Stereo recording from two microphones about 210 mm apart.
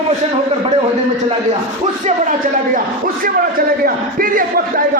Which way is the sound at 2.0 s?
35° right (ahead or behind).